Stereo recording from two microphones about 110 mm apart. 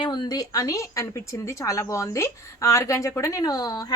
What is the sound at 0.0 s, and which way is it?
A woman's voice, 40° left (ahead or behind).